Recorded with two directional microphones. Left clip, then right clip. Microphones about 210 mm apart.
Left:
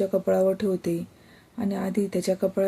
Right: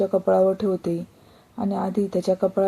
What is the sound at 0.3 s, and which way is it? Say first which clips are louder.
Speech: right 3 dB; centre (ahead or behind).